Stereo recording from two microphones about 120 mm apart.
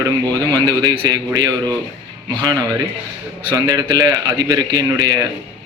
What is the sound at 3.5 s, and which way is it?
A man's voice, 30° right (ahead or behind).